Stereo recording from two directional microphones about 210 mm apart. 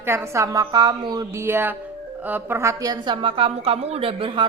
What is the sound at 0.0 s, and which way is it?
A woman's voice, 10° right (ahead or behind).